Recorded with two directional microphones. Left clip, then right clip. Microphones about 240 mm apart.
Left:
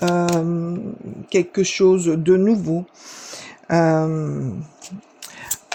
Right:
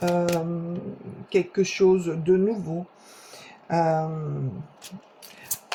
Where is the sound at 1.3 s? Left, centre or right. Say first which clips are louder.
Left 4 dB; left.